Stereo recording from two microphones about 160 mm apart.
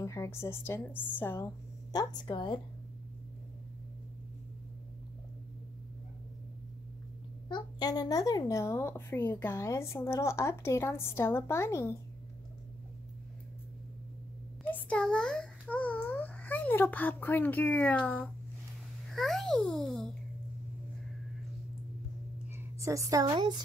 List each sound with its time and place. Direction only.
0.0 s speech: 20° left (ahead or behind)
7.4 s speech: 25° left (ahead or behind)
14.7 s a sound: 5° left (ahead or behind)
19.0 s a child's voice: centre (ahead or behind)
22.6 s a woman's voice: 20° right (ahead or behind)